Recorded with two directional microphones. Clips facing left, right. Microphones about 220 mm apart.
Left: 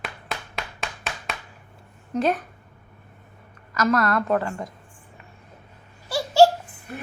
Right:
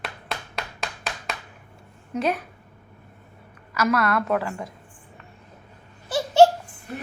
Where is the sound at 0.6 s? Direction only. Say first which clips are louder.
Right 1 dB; centre (ahead or behind).